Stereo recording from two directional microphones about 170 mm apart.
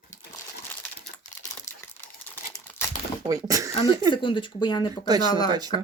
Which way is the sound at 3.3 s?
20° right (ahead or behind).